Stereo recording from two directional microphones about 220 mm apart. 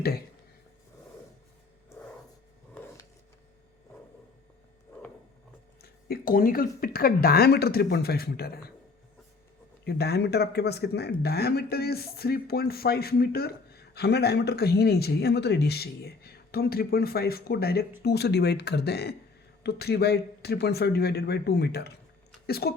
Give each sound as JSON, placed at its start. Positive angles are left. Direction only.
{"t": 5.8, "sound": "speech", "side_deg": 40}
{"t": 9.8, "sound": "speech", "side_deg": 45}